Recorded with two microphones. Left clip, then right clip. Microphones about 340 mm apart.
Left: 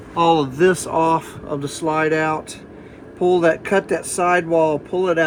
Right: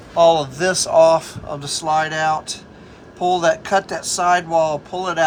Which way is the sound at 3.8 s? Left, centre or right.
Right.